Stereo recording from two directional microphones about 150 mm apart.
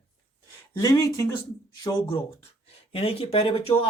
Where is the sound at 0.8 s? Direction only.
25° left (ahead or behind).